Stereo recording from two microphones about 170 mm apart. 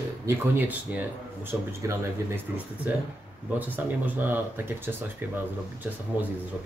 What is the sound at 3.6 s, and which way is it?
Speech, 10° right (ahead or behind).